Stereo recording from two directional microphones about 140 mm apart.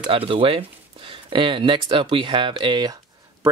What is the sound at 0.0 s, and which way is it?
Speech, 40° right (ahead or behind).